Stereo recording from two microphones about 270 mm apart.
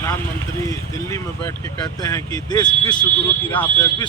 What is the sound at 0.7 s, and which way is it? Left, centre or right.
A man's voice, centre.